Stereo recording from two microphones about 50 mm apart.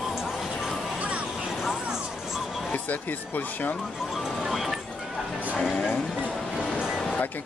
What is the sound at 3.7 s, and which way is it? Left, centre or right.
Speech, centre.